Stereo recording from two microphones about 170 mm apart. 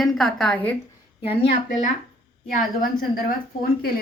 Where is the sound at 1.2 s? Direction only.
35° left (ahead or behind).